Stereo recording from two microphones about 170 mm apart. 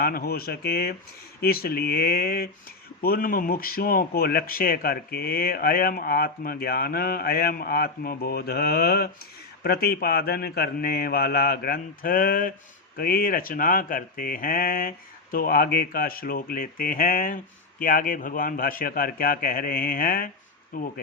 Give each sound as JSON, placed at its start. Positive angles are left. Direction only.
{"t": 0.0, "sound": "speech", "side_deg": 65}